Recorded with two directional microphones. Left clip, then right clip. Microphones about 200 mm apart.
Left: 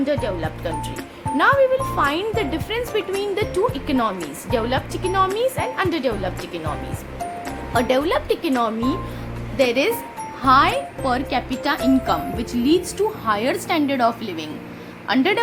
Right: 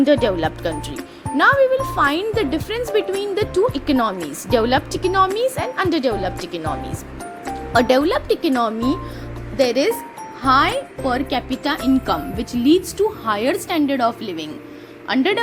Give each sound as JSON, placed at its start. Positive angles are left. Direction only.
{"t": 0.0, "sound": "speech", "side_deg": -35}
{"t": 1.4, "sound": "speech", "side_deg": -20}
{"t": 7.7, "sound": "speech", "side_deg": -25}